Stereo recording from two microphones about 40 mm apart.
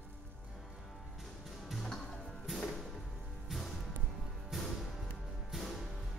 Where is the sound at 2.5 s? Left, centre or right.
Centre.